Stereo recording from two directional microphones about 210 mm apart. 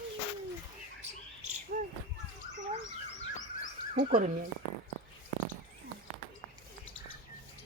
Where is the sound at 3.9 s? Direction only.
40° right (ahead or behind).